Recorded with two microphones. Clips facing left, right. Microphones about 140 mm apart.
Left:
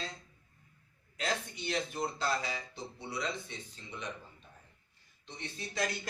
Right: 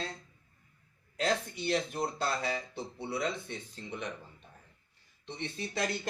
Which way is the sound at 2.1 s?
55° right (ahead or behind).